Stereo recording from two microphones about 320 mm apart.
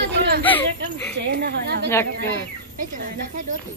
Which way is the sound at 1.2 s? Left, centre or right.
Right.